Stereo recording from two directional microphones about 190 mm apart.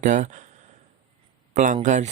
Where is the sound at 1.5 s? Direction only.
40° right (ahead or behind).